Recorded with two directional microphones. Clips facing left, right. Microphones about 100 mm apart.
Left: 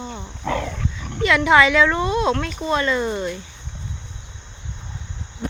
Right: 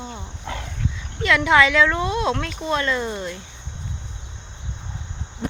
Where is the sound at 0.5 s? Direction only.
85° left.